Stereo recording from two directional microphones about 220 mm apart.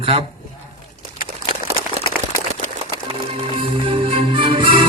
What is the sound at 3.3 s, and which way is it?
Music, 25° right (ahead or behind).